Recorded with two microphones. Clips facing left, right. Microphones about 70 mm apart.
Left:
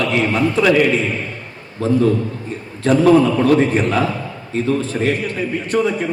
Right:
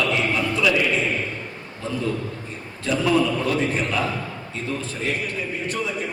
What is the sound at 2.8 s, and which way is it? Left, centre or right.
A man's voice, left.